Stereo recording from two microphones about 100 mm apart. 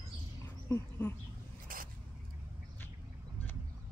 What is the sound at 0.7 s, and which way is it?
Speech, 20° left (ahead or behind).